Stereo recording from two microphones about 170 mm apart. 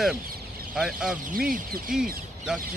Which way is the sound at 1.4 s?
55° right (ahead or behind).